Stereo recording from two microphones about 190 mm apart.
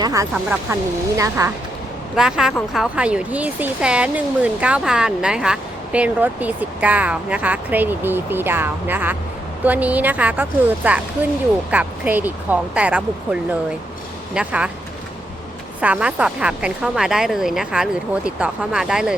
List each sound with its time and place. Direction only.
0.0 s speech: 15° right (ahead or behind)
2.1 s speech: 5° right (ahead or behind)
15.8 s speech: 5° right (ahead or behind)